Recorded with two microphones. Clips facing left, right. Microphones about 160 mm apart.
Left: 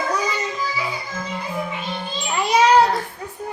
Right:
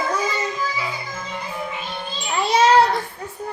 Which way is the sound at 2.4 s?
15° left (ahead or behind).